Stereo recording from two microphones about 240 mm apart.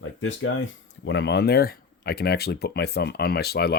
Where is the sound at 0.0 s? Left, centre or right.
Left.